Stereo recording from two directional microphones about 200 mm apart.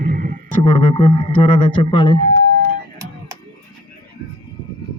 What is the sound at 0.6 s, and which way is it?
A man's voice, 30° left (ahead or behind).